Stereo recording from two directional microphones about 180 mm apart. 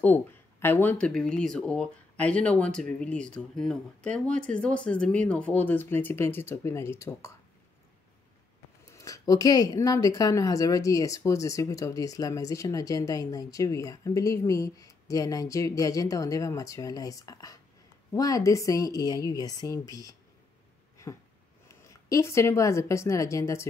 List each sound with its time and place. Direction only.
0.0 s speech: 10° left (ahead or behind)
8.9 s speech: 20° left (ahead or behind)
21.6 s a woman's voice: 15° left (ahead or behind)